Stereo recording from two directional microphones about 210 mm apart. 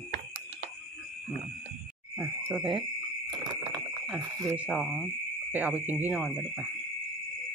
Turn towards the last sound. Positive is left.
turn(degrees=-5)  # may be behind; listen again after turning